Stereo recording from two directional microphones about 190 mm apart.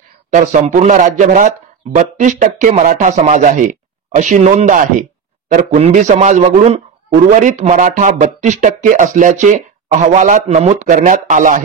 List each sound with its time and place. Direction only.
0.3 s speech: 40° right (ahead or behind)